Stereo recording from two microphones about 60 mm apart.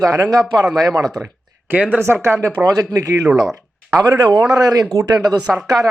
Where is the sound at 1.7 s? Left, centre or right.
Right.